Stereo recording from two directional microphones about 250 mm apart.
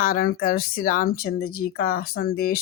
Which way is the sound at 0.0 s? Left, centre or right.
Left.